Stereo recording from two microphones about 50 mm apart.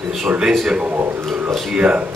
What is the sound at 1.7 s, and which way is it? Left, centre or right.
Speech, right.